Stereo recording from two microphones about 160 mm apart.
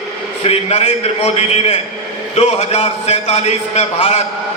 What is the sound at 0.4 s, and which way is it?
A man's voice, 40° left (ahead or behind).